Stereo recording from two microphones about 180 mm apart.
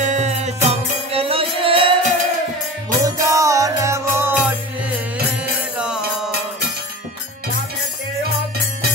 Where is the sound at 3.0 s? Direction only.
20° right (ahead or behind).